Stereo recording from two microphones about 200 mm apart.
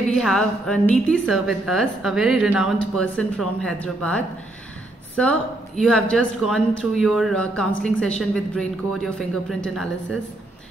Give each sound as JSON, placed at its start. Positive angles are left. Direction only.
{"t": 0.1, "sound": "a woman's voice", "side_deg": 5}